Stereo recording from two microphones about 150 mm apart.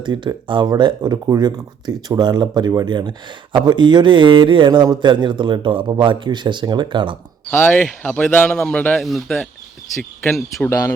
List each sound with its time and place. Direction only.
0.0 s speech: 30° right (ahead or behind)
7.5 s speech: 10° left (ahead or behind)
10.7 s speech: 20° left (ahead or behind)